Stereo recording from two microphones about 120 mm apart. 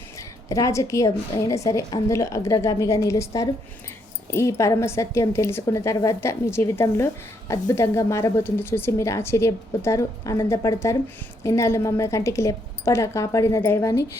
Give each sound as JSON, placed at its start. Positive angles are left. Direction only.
{"t": 0.2, "sound": "a woman's voice", "side_deg": 25}